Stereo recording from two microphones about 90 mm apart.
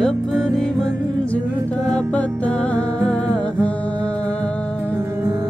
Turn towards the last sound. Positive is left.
turn(degrees=10)  # may be behind; listen again after turning